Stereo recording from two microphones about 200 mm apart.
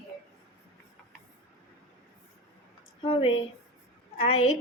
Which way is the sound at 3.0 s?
25° left (ahead or behind).